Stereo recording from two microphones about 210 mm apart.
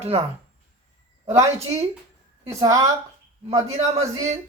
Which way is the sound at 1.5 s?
30° right (ahead or behind).